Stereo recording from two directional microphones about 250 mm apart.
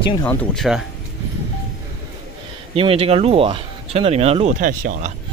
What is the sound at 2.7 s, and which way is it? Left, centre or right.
Speech, right.